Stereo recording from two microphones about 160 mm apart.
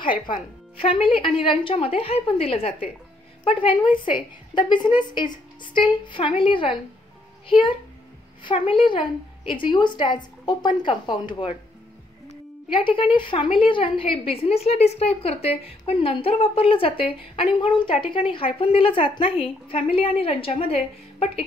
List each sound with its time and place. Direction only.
0.3 s a woman's voice: 35° left (ahead or behind)